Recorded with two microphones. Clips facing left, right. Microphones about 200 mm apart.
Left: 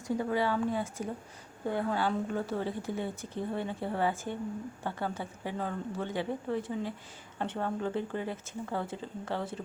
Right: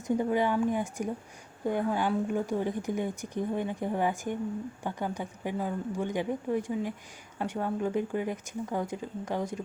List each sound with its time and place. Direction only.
0.1 s a woman's voice: 20° right (ahead or behind)